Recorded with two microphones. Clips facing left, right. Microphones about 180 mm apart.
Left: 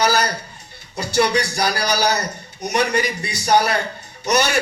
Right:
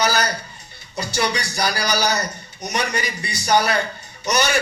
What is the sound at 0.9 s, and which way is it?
A man's voice, 60° left (ahead or behind).